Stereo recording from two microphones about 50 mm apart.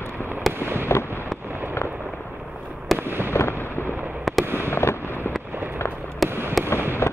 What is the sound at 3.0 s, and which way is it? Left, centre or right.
Fireworks, right.